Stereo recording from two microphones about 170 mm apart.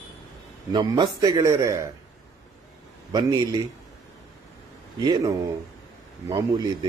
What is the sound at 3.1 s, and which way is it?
Speech, 25° right (ahead or behind).